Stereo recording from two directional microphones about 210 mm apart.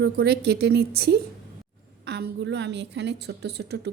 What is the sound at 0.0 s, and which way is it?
A woman's voice, 50° right (ahead or behind).